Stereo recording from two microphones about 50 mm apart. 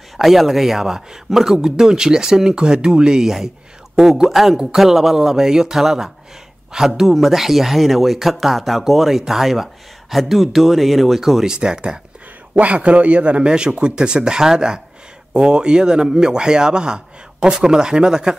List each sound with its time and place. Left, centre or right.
0.2 s a man's voice: centre
11.5 s a man's voice: centre
12.5 s a man's voice: right